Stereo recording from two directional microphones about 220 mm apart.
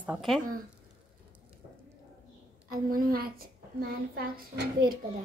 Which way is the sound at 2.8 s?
40° right (ahead or behind).